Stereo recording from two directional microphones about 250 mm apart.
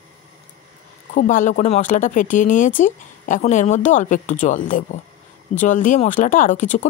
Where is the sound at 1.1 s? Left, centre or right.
Left.